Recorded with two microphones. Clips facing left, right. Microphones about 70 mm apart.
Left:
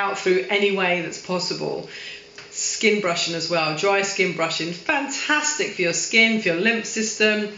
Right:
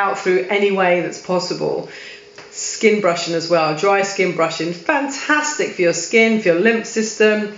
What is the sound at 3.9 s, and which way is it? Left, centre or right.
Speech, centre.